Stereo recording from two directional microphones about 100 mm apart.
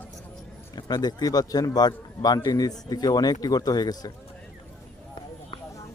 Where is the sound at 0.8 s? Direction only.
45° left (ahead or behind).